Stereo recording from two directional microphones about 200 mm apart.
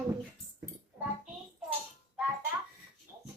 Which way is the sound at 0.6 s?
10° right (ahead or behind).